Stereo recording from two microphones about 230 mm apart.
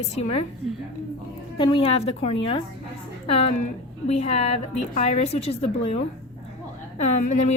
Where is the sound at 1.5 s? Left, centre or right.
Left.